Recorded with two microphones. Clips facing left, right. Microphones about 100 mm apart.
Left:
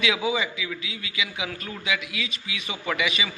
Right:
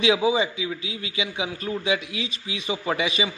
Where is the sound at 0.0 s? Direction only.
30° right (ahead or behind).